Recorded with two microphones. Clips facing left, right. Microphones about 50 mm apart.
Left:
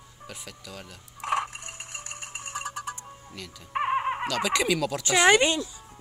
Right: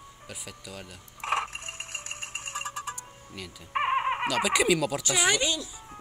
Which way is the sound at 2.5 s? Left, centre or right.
Right.